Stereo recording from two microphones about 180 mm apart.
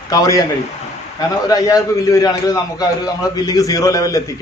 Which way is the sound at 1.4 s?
20° left (ahead or behind).